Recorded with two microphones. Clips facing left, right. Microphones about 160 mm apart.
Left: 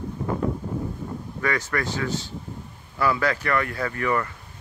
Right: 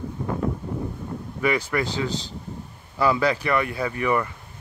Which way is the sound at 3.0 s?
15° right (ahead or behind).